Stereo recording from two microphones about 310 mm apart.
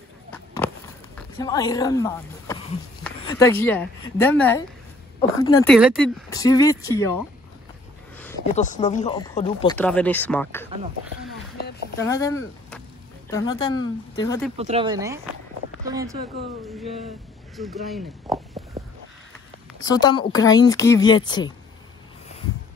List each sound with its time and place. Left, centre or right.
1.1 s speech: centre
5.7 s speech: centre
8.5 s speech: left
9.8 s speech: centre
12.0 s speech: centre
14.6 s speech: centre
17.6 s speech: centre
18.8 s boat: centre
19.8 s speech: centre